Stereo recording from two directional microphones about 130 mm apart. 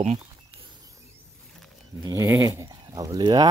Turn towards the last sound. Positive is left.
turn(degrees=-30)  # may be behind; listen again after turning